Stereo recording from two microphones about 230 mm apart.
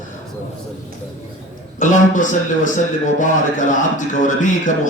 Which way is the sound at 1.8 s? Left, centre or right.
Left.